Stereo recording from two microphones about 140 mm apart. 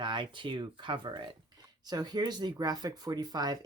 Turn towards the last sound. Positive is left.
turn(degrees=-30)  # may be behind; listen again after turning